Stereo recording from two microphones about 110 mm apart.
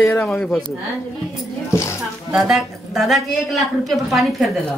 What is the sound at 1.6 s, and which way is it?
Speech, 25° left (ahead or behind).